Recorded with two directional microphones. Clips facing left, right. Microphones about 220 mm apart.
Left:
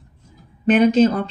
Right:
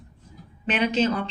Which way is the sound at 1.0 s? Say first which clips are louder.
Left 7 dB; 40° left (ahead or behind).